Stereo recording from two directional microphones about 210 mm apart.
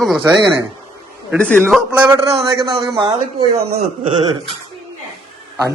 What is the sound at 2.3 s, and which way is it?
Speech, 25° right (ahead or behind).